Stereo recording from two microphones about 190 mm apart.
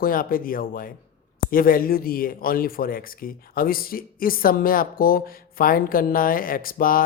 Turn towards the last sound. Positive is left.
turn(degrees=50)  # may be behind; listen again after turning